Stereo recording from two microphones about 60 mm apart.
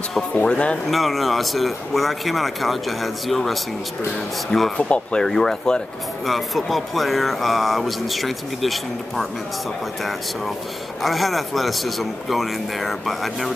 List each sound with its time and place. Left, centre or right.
0.3 s speech: centre
0.8 s speech: centre
4.7 s speech: centre
11.0 s speech: centre